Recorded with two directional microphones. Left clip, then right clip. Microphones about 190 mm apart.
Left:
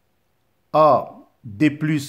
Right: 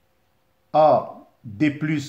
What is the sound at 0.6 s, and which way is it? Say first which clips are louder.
Speech: left 1 dB; 50° left (ahead or behind).